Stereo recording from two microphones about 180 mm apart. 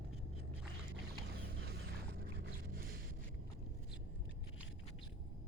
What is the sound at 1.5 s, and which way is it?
Vehicle, 65° right (ahead or behind).